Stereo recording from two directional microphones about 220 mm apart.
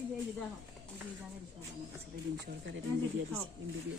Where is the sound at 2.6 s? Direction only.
60° right (ahead or behind).